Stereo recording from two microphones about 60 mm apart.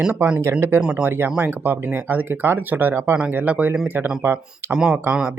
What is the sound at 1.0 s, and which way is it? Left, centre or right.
Speech, right.